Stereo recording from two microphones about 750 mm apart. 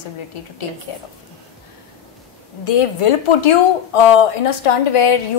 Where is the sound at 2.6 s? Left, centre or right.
Left.